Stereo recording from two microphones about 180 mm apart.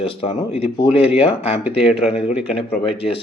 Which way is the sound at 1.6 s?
5° right (ahead or behind).